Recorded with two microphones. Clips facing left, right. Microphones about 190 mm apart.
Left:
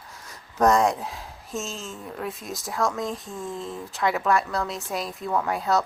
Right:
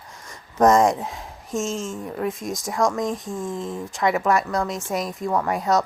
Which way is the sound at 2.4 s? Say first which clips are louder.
Right 6 dB; 45° right (ahead or behind).